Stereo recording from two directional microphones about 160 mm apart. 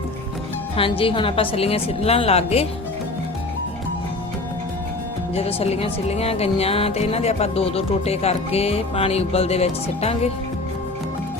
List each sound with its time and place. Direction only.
0.8 s speech: 35° left (ahead or behind)
5.3 s speech: 40° left (ahead or behind)